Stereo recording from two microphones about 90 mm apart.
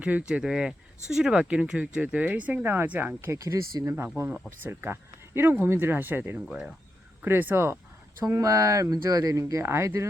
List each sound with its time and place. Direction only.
0.0 s speech: 15° right (ahead or behind)
3.3 s speech: 40° right (ahead or behind)
8.2 s speech: 35° right (ahead or behind)